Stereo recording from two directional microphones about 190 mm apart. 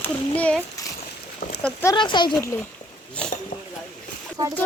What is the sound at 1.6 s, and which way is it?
Speech, 15° left (ahead or behind).